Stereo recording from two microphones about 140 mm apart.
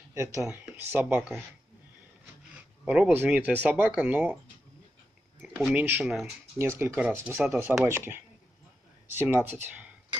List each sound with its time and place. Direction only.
0.1 s speech: 20° right (ahead or behind)
2.8 s speech: 10° right (ahead or behind)
5.7 s speech: 10° right (ahead or behind)